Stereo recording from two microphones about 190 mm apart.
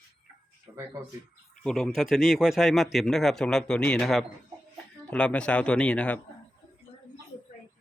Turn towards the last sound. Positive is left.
turn(degrees=5)  # may be behind; listen again after turning